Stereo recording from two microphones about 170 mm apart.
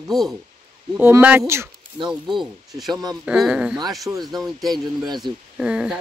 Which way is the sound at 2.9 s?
20° right (ahead or behind).